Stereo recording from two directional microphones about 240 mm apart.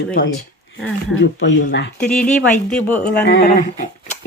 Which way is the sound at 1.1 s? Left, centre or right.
Left.